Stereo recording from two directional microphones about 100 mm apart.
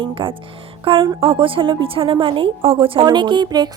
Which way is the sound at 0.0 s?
60° right (ahead or behind).